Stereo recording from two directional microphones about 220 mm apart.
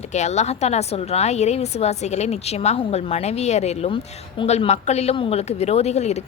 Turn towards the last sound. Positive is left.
turn(degrees=30)  # may be behind; listen again after turning